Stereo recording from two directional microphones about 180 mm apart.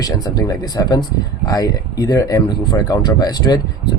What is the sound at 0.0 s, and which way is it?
Speech, 20° left (ahead or behind).